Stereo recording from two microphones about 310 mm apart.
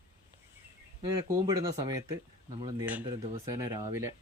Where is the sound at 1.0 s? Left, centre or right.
Centre.